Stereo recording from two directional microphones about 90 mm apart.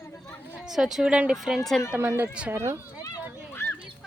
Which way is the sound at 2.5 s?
35° right (ahead or behind).